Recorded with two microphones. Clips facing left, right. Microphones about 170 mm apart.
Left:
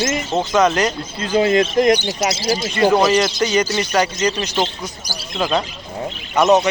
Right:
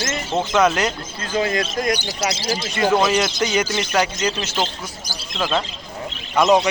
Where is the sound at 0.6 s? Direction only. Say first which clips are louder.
Left 2 dB; 5° right (ahead or behind).